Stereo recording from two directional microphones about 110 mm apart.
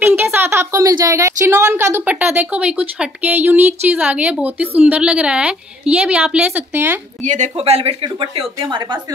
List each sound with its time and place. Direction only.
0.0 s a woman's voice: 20° right (ahead or behind)
7.2 s speech: 90° right; by 7.9 s 65° right (ahead or behind)
8.0 s speech: 50° right (ahead or behind)